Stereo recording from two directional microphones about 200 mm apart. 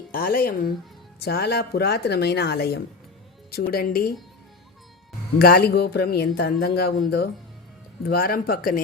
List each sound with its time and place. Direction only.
0.1 s speech: 45° left (ahead or behind)
5.4 s speech: 50° left (ahead or behind)
8.0 s speech: 50° left (ahead or behind)